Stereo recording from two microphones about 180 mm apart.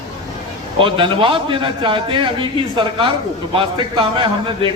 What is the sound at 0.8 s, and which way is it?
A man's voice, 30° right (ahead or behind).